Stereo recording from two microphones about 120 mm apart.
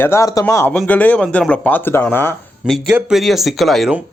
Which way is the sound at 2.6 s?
5° right (ahead or behind).